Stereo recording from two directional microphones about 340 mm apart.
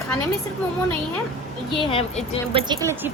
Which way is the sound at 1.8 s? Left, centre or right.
Centre.